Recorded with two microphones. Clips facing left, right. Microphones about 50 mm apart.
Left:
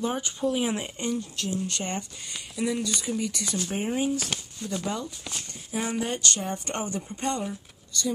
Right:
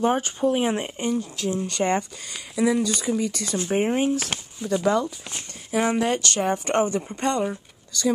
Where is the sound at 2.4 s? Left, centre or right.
Right.